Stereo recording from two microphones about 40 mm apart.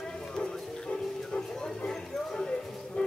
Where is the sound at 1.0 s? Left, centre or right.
Centre.